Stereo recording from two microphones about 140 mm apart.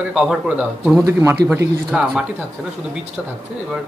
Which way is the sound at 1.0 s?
20° right (ahead or behind).